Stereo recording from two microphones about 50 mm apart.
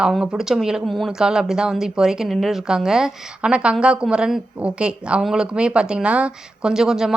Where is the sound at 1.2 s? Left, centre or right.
Centre.